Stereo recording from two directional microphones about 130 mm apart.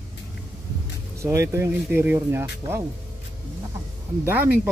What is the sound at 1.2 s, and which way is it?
Speech, 20° right (ahead or behind).